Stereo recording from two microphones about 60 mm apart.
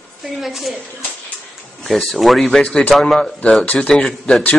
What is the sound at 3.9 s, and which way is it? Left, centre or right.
Speech, centre.